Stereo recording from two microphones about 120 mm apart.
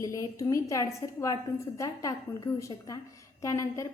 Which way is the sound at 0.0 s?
25° left (ahead or behind).